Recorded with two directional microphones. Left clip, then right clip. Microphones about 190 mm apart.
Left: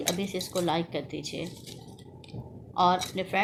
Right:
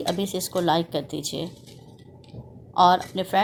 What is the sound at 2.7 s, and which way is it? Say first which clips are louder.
Speech: right 6 dB; 45° right (ahead or behind).